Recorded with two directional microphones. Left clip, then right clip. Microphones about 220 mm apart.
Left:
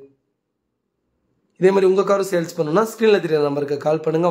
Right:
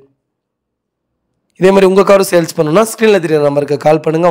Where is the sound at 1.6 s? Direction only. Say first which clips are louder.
Right 8 dB; 40° right (ahead or behind).